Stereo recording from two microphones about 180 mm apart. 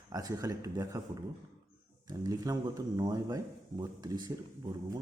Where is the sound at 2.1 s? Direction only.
20° right (ahead or behind).